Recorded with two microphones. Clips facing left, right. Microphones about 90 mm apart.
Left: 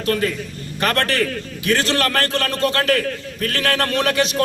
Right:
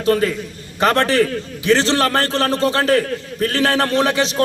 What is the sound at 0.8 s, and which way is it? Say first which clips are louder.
A man's voice: right 5 dB; 25° right (ahead or behind).